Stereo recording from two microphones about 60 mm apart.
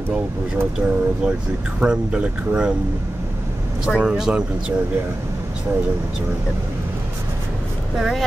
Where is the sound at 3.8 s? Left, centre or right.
Centre.